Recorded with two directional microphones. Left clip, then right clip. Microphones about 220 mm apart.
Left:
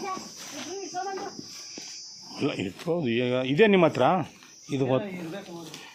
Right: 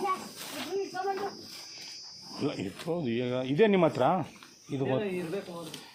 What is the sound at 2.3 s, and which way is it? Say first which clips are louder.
Speech: left 4 dB; 40° left (ahead or behind).